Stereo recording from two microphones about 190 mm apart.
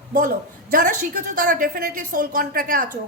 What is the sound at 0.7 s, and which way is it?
A woman's voice, 45° right (ahead or behind).